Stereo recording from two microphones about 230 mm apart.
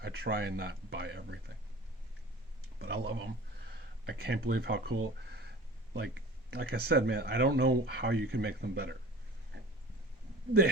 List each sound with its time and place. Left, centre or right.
0.0 s speech: right
2.7 s speech: right
6.5 s speech: right